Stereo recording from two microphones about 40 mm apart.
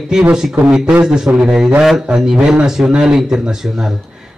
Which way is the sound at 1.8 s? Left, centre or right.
Centre.